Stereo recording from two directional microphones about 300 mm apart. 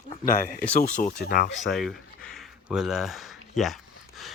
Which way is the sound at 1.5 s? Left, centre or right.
Centre.